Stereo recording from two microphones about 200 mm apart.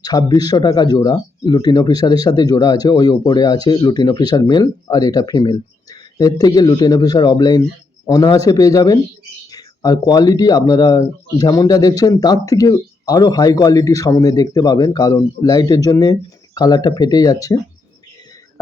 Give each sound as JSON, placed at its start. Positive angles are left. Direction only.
{"t": 0.0, "sound": "speech", "side_deg": 20}